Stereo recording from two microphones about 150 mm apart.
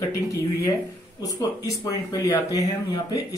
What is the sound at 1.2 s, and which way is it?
Speech, 25° left (ahead or behind).